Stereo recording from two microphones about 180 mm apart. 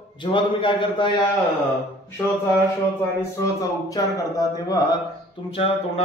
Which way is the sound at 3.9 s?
20° left (ahead or behind).